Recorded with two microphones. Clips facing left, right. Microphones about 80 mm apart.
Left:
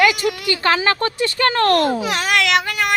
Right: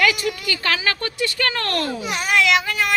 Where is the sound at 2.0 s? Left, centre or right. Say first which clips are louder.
Left 1 dB; left.